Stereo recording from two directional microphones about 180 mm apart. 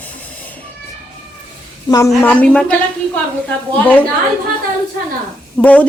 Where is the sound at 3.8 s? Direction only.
10° left (ahead or behind).